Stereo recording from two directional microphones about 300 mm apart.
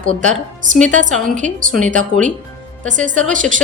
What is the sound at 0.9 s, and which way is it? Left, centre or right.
A woman's voice, right.